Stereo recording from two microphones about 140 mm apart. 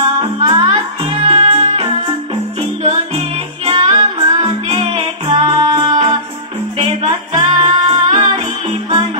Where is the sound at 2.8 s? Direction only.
45° right (ahead or behind).